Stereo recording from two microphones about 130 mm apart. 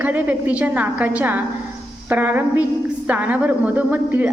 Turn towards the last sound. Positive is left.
turn(degrees=-10)  # may be behind; listen again after turning